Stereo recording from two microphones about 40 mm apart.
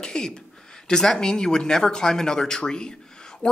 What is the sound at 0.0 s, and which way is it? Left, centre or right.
Speech, centre.